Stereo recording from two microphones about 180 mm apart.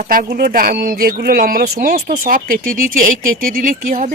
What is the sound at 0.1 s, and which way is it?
Speech, 55° right (ahead or behind).